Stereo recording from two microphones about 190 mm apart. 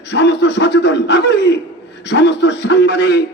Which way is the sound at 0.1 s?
65° left (ahead or behind).